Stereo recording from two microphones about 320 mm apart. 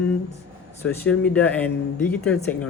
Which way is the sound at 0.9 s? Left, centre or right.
Centre.